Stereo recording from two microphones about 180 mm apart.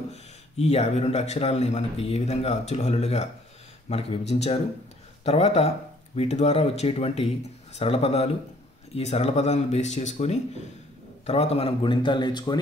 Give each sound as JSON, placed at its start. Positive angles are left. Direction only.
{"t": 0.1, "sound": "a man's voice", "side_deg": 35}